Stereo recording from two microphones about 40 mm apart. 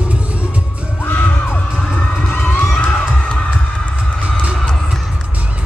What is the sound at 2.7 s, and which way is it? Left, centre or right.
Crowd, left.